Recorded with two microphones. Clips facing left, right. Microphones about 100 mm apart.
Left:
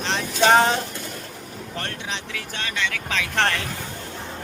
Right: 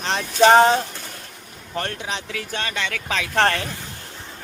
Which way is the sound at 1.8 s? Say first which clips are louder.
Right 3 dB; 40° right (ahead or behind).